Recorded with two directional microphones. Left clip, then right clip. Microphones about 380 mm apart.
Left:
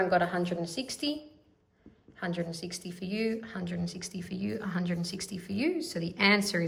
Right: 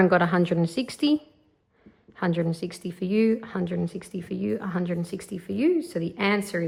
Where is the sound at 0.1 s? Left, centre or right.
Centre.